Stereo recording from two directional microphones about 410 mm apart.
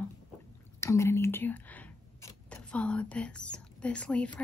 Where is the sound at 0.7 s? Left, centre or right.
Centre.